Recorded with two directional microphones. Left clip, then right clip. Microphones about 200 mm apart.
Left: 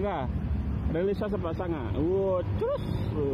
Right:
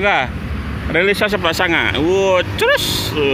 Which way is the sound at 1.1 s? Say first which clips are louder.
Right 16 dB; 35° right (ahead or behind).